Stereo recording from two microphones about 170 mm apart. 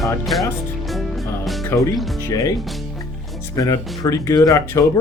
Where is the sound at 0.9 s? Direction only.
Centre (ahead or behind).